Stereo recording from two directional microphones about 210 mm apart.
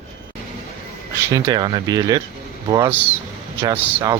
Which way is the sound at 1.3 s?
20° right (ahead or behind).